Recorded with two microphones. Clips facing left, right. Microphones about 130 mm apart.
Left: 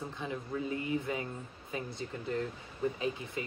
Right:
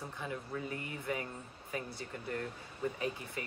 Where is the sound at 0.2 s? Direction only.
20° left (ahead or behind).